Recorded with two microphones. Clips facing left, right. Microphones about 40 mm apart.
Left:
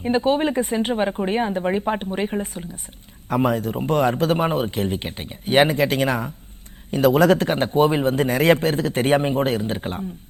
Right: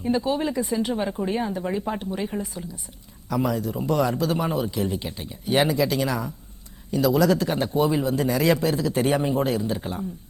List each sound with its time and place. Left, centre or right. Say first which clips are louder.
0.0 s a man's voice: left 4 dB; left